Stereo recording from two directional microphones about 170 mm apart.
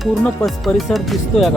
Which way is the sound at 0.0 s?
Centre (ahead or behind).